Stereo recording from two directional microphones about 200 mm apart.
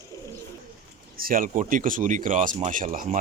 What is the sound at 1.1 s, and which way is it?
Speech, 45° right (ahead or behind).